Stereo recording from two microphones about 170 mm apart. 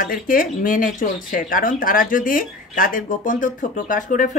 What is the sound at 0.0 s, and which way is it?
Speech, 55° left (ahead or behind).